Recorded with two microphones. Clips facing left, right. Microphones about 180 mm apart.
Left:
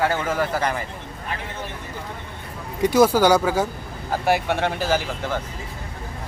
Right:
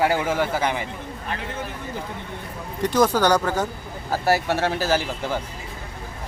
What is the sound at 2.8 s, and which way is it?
Speech, 10° left (ahead or behind).